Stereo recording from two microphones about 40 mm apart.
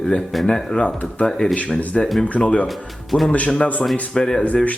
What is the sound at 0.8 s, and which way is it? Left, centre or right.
Speech, left.